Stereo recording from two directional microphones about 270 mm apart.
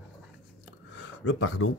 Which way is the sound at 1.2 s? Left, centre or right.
Left.